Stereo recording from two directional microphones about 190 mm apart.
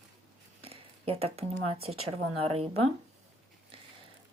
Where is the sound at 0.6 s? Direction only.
30° right (ahead or behind).